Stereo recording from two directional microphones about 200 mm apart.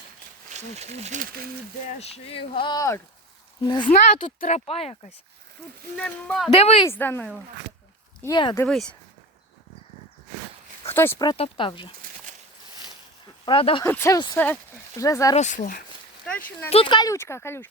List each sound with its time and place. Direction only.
0.5 s speech: 35° right (ahead or behind)
2.0 s speech: 30° left (ahead or behind)
3.8 s speech: 40° left (ahead or behind)
6.0 s speech: 5° left (ahead or behind)
6.5 s speech: 30° left (ahead or behind)
6.8 s speech: 10° left (ahead or behind)
8.2 s speech: 20° left (ahead or behind)
8.5 s speech: 5° left (ahead or behind)
10.9 s speech: 10° left (ahead or behind)
13.4 s speech: 25° left (ahead or behind)
13.8 s speech: 10° left (ahead or behind)
15.4 s speech: 40° left (ahead or behind)
16.6 s speech: 25° left (ahead or behind)